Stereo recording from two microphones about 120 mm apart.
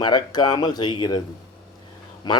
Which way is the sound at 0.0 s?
35° left (ahead or behind).